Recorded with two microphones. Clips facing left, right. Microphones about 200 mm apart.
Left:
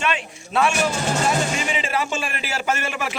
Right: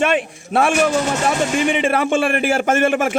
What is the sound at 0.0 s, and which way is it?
A man's voice, 55° right (ahead or behind).